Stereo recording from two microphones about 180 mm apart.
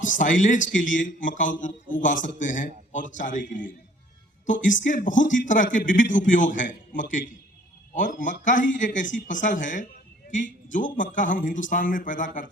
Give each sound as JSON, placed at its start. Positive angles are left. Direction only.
{"t": 0.0, "sound": "a man's voice", "side_deg": 45}